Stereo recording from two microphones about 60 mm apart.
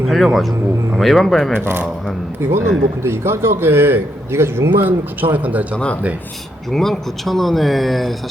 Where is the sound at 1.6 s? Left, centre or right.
Right.